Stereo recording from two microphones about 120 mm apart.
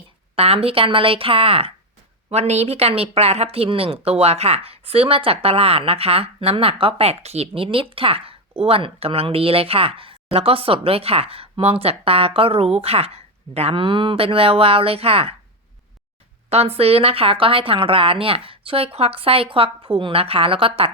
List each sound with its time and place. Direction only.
0.3 s speech: 55° right (ahead or behind)
2.3 s speech: 65° right (ahead or behind)
16.5 s speech: 60° right (ahead or behind)